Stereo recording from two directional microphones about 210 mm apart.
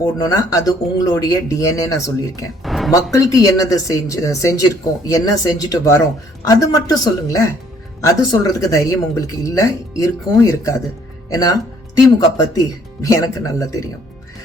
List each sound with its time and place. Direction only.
0.0 s a woman's voice: 15° left (ahead or behind)
2.6 s a sound: centre (ahead or behind)
2.9 s a woman's voice: 15° left (ahead or behind)